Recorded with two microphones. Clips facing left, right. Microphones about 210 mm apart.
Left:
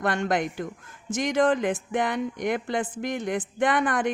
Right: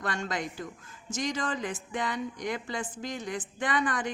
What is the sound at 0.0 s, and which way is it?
A woman's voice, 55° left (ahead or behind).